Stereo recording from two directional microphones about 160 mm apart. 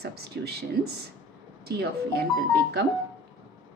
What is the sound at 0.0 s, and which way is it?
A woman's voice, 80° right.